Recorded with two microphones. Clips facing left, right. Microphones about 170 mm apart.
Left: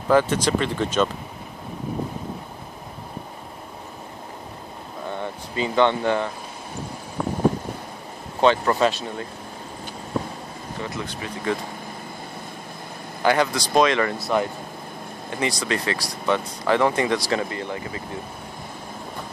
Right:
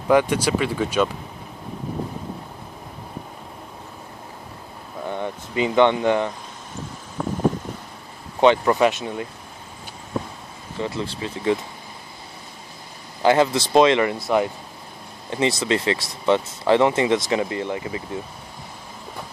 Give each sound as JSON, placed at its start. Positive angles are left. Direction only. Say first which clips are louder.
{"t": 0.1, "sound": "speech", "louder": "right 1 dB", "side_deg": -15}
{"t": 5.2, "sound": "speech", "louder": "right 4 dB", "side_deg": -20}
{"t": 8.4, "sound": "speech", "louder": "right 2 dB", "side_deg": -20}
{"t": 10.8, "sound": "speech", "louder": "right 5 dB", "side_deg": -30}
{"t": 13.2, "sound": "speech", "louder": "right 3 dB", "side_deg": -25}